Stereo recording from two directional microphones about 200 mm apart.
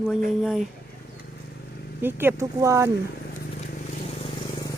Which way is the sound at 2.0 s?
10° right (ahead or behind).